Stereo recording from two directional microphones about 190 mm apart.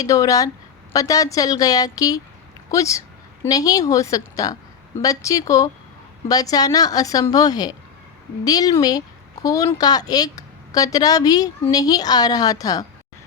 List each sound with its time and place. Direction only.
0.0 s speech: 15° left (ahead or behind)